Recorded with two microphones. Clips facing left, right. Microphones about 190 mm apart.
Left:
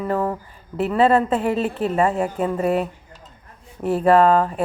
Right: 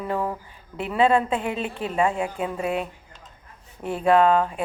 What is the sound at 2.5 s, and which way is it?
Speech, 40° left (ahead or behind).